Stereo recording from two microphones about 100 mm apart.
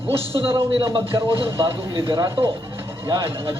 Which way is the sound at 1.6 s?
50° right (ahead or behind).